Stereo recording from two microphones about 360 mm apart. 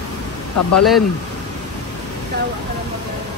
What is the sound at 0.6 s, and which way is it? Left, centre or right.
Speech, left.